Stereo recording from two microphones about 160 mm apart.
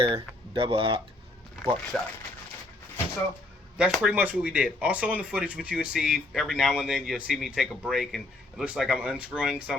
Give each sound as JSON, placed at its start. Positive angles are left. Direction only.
{"t": 0.0, "sound": "speech", "side_deg": -35}
{"t": 1.9, "sound": "speech", "side_deg": 0}
{"t": 3.8, "sound": "speech", "side_deg": -5}